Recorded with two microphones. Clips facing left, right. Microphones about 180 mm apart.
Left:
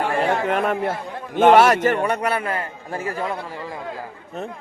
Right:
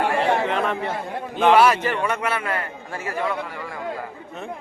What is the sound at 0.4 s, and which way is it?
Chatter, 50° left (ahead or behind).